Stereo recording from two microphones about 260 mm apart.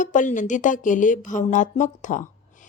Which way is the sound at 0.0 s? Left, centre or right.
Left.